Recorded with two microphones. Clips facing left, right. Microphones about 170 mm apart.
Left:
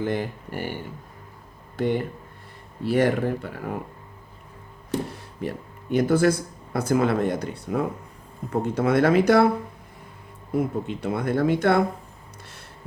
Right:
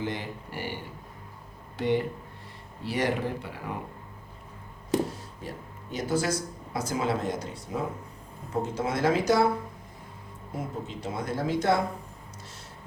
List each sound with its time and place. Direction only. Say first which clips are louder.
0.0 s speech: left 7 dB; 50° left (ahead or behind)
5.0 s speech: left 6 dB; 65° left (ahead or behind)
10.5 s speech: left 10 dB; 60° left (ahead or behind)